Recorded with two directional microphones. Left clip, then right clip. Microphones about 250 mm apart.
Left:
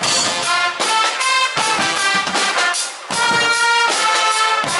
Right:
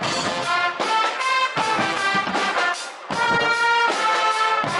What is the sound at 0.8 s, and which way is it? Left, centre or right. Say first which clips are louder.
Music: left 4 dB; centre.